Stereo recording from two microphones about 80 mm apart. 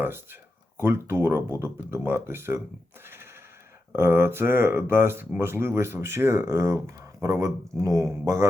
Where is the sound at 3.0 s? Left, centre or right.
Right.